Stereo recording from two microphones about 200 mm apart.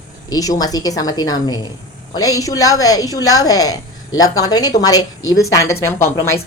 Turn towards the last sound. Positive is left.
turn(degrees=15)  # may be behind; listen again after turning